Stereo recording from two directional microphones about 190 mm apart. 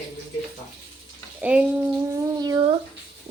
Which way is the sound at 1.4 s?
5° right (ahead or behind).